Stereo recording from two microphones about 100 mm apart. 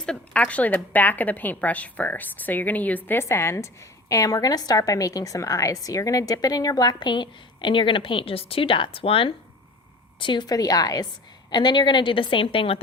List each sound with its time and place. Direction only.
0.0 s a woman's voice: 10° left (ahead or behind); by 9.3 s 65° left (ahead or behind)
10.2 s a woman's voice: 50° left (ahead or behind)
11.5 s a woman's voice: 50° left (ahead or behind); by 12.8 s 70° left (ahead or behind)